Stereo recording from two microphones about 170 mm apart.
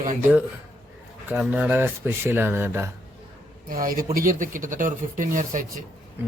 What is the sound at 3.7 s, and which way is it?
Speech, 55° right (ahead or behind).